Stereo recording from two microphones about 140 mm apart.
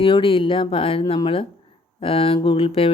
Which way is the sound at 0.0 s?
40° left (ahead or behind).